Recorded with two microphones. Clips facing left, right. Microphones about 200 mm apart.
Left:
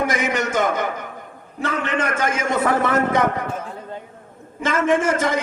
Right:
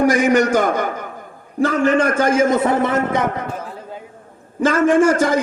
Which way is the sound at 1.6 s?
35° right (ahead or behind).